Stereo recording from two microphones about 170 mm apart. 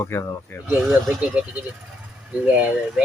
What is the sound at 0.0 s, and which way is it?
Speech, 15° left (ahead or behind).